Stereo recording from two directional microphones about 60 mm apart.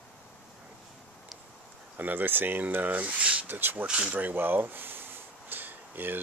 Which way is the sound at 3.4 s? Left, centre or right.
Right.